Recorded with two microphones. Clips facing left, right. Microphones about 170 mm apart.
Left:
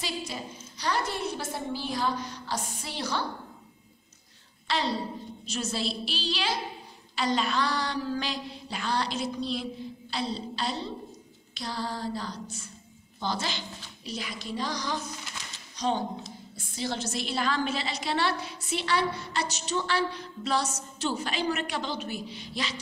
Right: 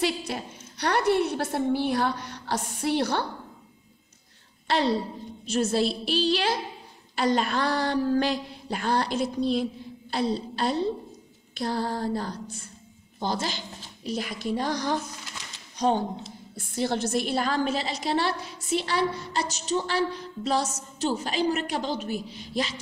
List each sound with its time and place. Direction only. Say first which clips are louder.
0.0 s a woman's voice: right 7 dB; 65° right (ahead or behind)
4.6 s a woman's voice: right 5 dB; 55° right (ahead or behind)
13.2 s a woman's voice: right 3 dB; 45° right (ahead or behind)
15.7 s a sound: right 5 dB; 55° right (ahead or behind)
16.5 s a woman's voice: right 6 dB; 55° right (ahead or behind)